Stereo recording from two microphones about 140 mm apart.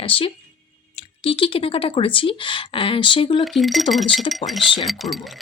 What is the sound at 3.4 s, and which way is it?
Speech, centre (ahead or behind).